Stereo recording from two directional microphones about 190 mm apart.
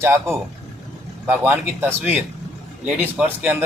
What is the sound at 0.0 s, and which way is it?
Speech, 15° right (ahead or behind).